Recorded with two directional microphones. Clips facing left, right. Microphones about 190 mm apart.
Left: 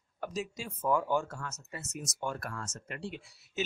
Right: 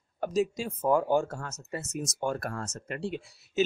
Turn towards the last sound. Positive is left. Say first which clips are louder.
# right 8 dB
turn(degrees=-35)  # may be behind; listen again after turning